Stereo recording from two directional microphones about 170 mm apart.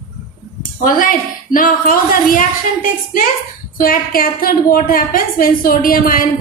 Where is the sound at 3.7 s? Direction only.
55° left (ahead or behind).